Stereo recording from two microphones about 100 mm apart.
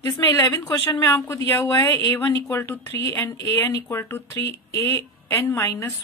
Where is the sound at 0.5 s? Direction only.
35° left (ahead or behind).